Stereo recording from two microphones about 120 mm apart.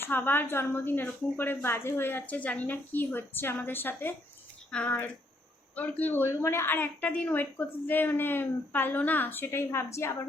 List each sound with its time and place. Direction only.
0.0 s a woman's voice: 15° left (ahead or behind)